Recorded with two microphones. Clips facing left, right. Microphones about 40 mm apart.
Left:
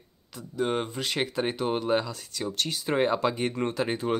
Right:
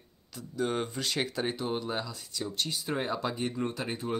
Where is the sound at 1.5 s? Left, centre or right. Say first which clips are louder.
Left 7 dB; left.